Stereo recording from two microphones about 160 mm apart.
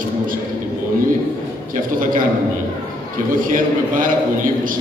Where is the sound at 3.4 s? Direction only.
60° right (ahead or behind).